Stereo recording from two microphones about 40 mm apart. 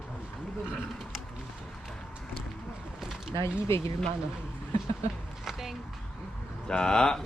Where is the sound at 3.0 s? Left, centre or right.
Centre.